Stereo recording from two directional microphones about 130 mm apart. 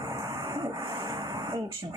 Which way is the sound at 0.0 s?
25° right (ahead or behind).